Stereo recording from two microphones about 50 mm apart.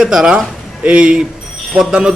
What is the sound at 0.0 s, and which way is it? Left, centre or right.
Speech, centre.